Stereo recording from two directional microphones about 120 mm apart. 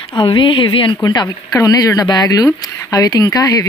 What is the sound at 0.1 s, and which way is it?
Speech, 40° left (ahead or behind).